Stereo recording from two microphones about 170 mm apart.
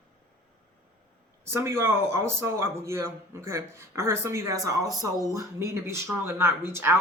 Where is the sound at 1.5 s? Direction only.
15° right (ahead or behind).